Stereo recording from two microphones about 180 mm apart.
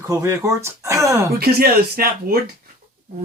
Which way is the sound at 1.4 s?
60° right (ahead or behind).